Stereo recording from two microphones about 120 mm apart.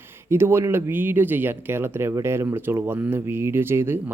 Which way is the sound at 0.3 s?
20° right (ahead or behind).